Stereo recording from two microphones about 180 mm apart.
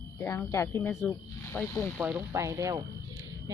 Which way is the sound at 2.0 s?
10° right (ahead or behind).